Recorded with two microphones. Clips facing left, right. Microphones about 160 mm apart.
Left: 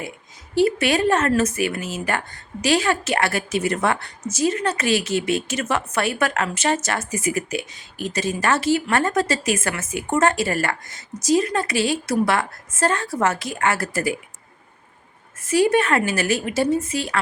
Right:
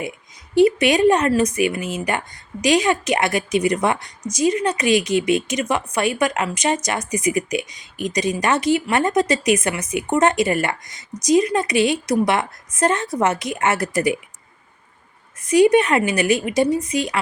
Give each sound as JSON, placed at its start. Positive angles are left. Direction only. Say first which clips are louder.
{"t": 0.5, "sound": "a woman's voice", "louder": "right 4 dB", "side_deg": -15}
{"t": 15.4, "sound": "a woman's voice", "louder": "right 4 dB", "side_deg": -15}